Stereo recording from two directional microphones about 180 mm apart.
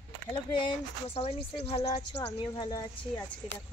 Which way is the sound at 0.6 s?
30° left (ahead or behind).